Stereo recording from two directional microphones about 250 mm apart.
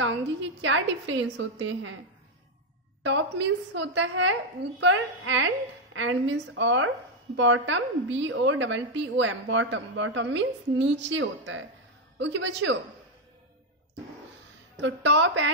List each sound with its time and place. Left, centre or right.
0.0 s a woman's voice: right
3.0 s a woman's voice: right
14.8 s a woman's voice: right